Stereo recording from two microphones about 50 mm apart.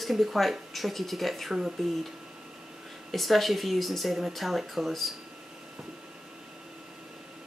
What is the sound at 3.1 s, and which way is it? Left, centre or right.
Speech, centre.